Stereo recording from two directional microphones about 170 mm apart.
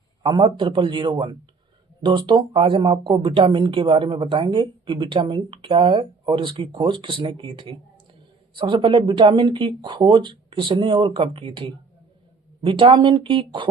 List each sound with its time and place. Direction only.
0.2 s a woman's voice: 30° right (ahead or behind)